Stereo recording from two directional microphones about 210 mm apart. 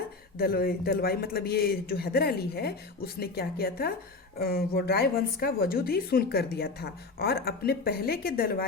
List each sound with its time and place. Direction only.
0.3 s a woman's voice: 45° left (ahead or behind)